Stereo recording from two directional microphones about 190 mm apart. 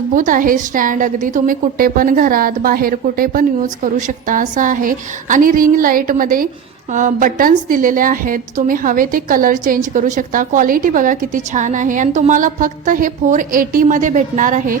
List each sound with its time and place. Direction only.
0.1 s a woman's voice: 45° right (ahead or behind)